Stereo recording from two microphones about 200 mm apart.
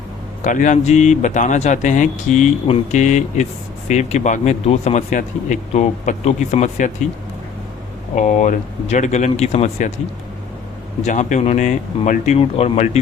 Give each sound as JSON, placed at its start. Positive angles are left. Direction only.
{"t": 0.4, "sound": "speech", "side_deg": 40}
{"t": 8.1, "sound": "speech", "side_deg": 35}
{"t": 11.0, "sound": "speech", "side_deg": 35}